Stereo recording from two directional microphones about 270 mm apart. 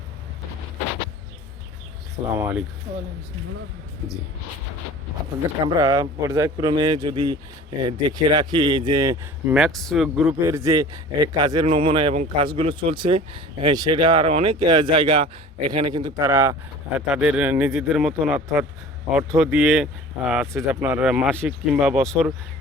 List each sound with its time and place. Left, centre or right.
2.3 s a man's voice: centre
5.6 s a man's voice: centre
9.6 s a man's voice: centre